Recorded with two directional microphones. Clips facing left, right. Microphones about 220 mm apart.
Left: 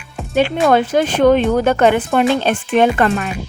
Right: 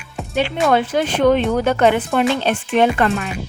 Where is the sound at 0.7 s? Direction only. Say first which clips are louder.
Left 3 dB; 45° left (ahead or behind).